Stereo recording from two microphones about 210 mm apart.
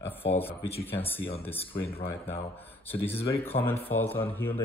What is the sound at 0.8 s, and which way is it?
Speech, 10° left (ahead or behind).